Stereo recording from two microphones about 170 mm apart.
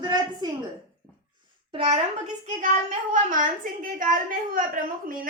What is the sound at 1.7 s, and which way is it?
Speech, 30° right (ahead or behind).